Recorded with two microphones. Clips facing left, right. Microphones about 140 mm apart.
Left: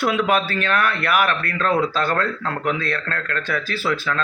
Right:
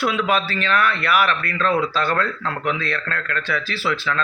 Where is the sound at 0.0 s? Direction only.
50° left (ahead or behind).